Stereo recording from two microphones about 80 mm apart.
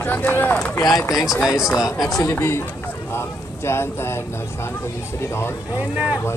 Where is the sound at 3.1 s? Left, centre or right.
Left.